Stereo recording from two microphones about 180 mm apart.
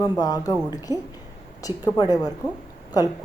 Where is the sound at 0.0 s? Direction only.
20° left (ahead or behind).